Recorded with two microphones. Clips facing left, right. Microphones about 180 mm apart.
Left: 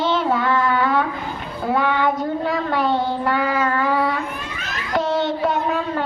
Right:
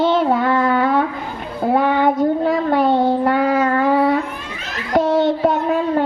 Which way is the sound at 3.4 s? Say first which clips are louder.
Right 4 dB; 35° right (ahead or behind).